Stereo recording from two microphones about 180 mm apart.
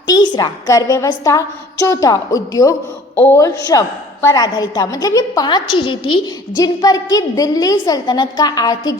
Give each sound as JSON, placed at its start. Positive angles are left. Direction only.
{"t": 0.2, "sound": "a woman's voice", "side_deg": 20}